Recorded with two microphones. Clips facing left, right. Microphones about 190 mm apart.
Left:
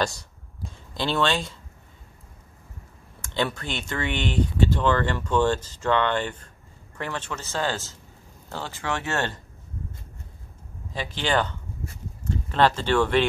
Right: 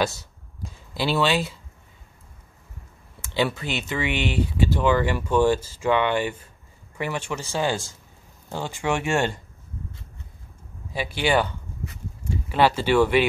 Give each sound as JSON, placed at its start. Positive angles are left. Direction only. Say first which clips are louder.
{"t": 0.0, "sound": "a sound", "louder": "right 2 dB", "side_deg": -5}
{"t": 3.2, "sound": "speech", "louder": "right 3 dB", "side_deg": -5}
{"t": 10.9, "sound": "speech", "louder": "right 3 dB", "side_deg": -10}